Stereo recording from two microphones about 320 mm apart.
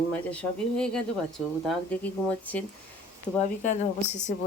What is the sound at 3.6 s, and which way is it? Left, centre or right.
Speech, left.